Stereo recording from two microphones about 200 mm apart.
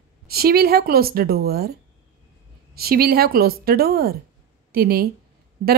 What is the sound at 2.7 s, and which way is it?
Speech, 50° right (ahead or behind).